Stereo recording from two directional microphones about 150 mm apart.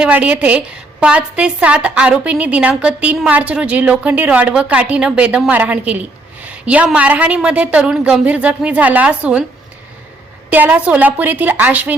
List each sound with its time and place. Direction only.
0.0 s a woman's voice: 10° right (ahead or behind)
10.5 s a woman's voice: 10° right (ahead or behind)